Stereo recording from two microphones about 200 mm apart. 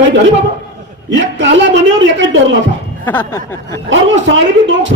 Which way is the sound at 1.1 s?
65° right (ahead or behind).